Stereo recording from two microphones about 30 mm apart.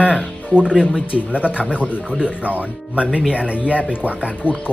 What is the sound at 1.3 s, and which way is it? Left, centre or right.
Speech, right.